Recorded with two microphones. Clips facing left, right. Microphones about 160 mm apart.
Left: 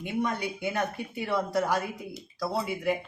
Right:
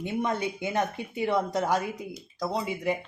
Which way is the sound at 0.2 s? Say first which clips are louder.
Even; 20° right (ahead or behind).